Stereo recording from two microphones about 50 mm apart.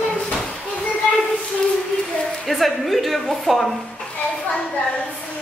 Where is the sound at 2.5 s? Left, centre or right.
Centre.